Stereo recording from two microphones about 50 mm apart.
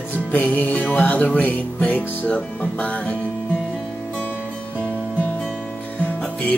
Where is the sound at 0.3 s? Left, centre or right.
Left.